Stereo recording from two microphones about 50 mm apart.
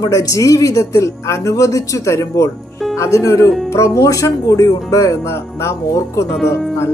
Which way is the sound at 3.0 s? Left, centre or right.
Left.